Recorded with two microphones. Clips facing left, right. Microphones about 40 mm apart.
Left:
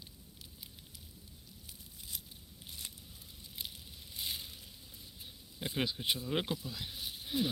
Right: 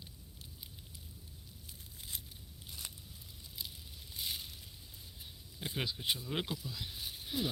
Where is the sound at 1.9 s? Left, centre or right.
Right.